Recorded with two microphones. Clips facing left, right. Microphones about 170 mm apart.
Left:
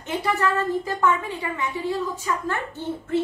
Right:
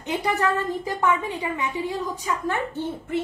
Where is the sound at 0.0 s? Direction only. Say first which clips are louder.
Even; 15° right (ahead or behind).